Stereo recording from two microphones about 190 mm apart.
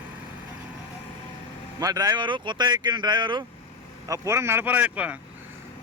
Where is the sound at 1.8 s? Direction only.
20° right (ahead or behind).